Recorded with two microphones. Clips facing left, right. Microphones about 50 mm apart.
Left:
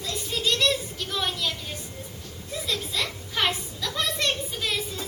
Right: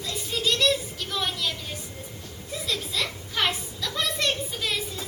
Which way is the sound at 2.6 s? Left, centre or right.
Centre.